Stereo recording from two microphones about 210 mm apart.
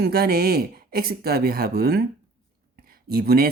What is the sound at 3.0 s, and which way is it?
Speech, 50° right (ahead or behind).